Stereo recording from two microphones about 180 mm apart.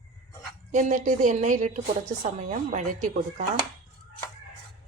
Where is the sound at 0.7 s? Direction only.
45° right (ahead or behind).